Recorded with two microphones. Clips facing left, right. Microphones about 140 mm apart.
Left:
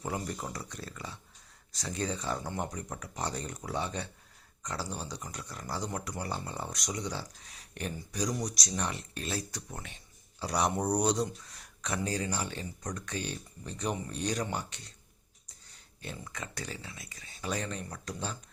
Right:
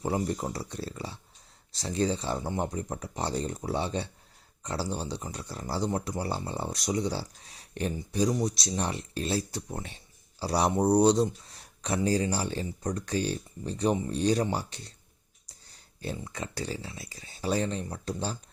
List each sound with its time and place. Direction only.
0.0 s speech: 30° right (ahead or behind)